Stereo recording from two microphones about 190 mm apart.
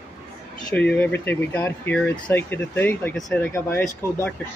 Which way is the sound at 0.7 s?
10° left (ahead or behind).